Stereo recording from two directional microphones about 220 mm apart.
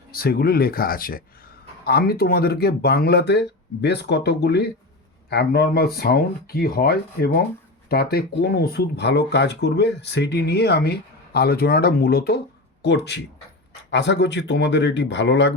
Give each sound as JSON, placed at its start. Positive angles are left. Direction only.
{"t": 0.1, "sound": "speech", "side_deg": 45}